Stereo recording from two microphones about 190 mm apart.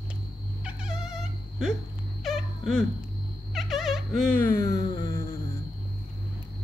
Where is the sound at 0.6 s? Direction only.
5° right (ahead or behind).